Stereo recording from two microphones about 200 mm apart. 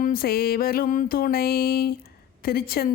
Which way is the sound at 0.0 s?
45° left (ahead or behind).